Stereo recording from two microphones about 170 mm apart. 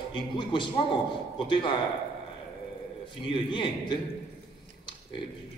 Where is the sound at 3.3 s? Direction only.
30° left (ahead or behind).